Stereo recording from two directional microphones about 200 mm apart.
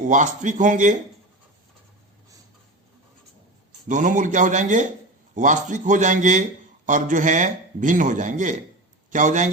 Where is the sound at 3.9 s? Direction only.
40° right (ahead or behind).